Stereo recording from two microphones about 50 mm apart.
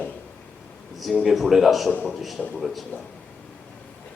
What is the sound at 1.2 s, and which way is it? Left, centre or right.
A man's voice, centre.